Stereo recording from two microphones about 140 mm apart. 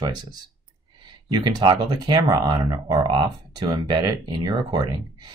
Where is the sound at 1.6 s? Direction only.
35° right (ahead or behind).